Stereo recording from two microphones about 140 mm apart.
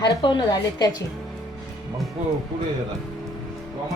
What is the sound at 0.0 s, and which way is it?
A woman's voice, 35° left (ahead or behind).